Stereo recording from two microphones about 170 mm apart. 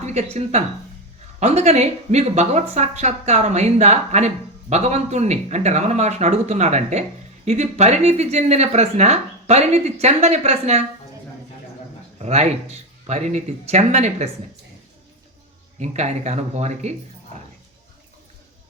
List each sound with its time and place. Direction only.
0.0 s speech: 40° right (ahead or behind)
12.2 s speech: 40° right (ahead or behind)
15.8 s speech: 40° right (ahead or behind)